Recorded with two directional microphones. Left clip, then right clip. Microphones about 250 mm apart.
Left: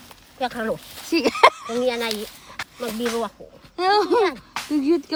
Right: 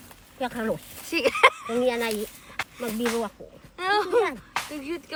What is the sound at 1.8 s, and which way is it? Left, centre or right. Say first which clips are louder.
Speech: left 2 dB; centre.